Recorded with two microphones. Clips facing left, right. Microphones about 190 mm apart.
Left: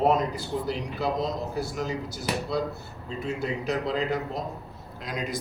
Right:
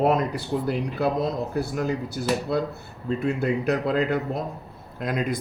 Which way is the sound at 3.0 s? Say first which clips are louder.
Right 6 dB; 60° right (ahead or behind).